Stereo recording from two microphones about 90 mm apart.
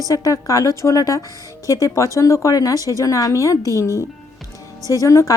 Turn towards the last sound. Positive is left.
turn(degrees=35)  # may be behind; listen again after turning